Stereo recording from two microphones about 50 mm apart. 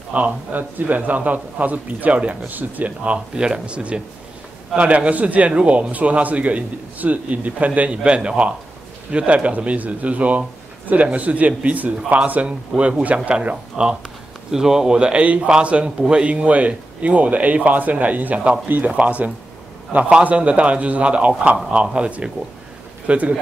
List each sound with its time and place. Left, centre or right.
0.1 s a man's voice: right